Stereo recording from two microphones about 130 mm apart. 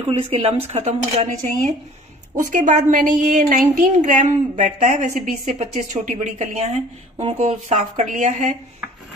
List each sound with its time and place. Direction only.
0.3 s speech: 50° right (ahead or behind)
2.4 s a woman's voice: 75° right (ahead or behind)